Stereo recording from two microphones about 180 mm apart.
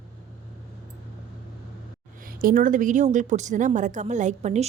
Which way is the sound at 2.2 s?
50° right (ahead or behind).